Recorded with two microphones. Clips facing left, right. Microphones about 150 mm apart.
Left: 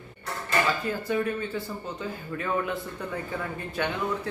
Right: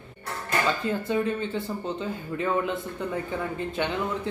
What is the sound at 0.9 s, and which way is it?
Speech, 25° right (ahead or behind).